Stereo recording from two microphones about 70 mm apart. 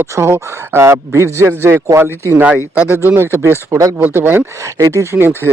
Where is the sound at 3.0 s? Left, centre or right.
Right.